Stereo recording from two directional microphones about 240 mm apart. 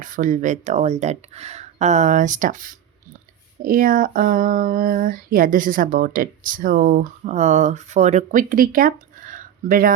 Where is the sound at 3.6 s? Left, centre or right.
Right.